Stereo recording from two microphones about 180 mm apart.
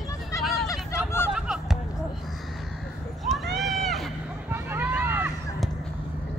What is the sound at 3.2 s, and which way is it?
Run, centre (ahead or behind).